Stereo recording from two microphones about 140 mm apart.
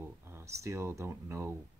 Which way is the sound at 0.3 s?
20° right (ahead or behind).